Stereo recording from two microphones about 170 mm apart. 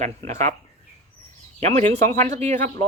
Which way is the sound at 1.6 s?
40° right (ahead or behind).